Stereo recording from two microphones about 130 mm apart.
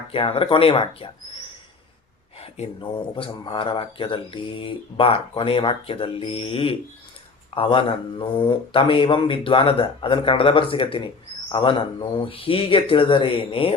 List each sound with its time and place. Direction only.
0.1 s speech: 45° left (ahead or behind)
2.4 s speech: 45° left (ahead or behind)